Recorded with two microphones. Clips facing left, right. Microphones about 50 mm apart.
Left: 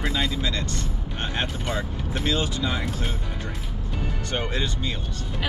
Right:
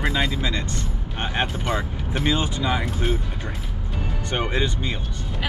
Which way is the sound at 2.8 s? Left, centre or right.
Centre.